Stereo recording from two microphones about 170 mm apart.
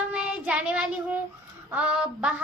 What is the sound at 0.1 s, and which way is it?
Child singing, 5° right (ahead or behind).